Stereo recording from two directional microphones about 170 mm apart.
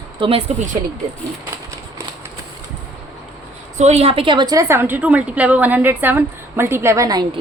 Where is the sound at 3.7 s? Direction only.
40° right (ahead or behind); by 7.4 s 25° right (ahead or behind).